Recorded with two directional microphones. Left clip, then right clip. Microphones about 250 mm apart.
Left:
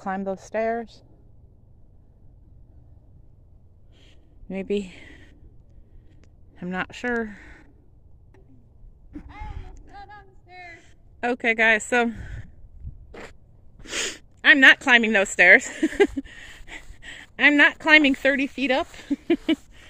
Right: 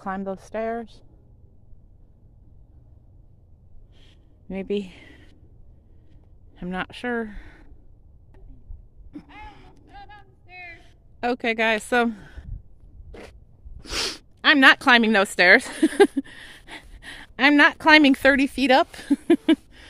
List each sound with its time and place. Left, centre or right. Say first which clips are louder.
0.0 s speech: left 1 dB; centre
4.0 s a sound: left 1 dB; centre
6.5 s speech: left 1 dB; centre
9.1 s a sound: even; centre
13.1 s zipper: left 2 dB; centre
13.8 s speech: right 1 dB; centre